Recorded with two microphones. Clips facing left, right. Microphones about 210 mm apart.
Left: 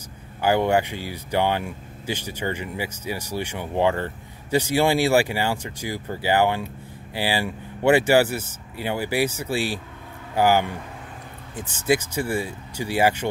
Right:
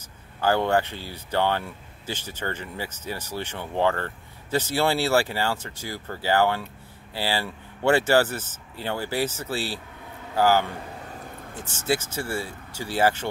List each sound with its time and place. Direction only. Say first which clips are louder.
0.4 s speech: left 2 dB; 15° left (ahead or behind)